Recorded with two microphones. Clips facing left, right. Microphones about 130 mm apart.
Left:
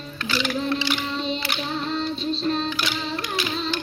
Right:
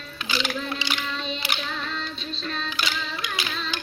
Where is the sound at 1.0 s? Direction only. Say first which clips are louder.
Left 4 dB; 30° left (ahead or behind).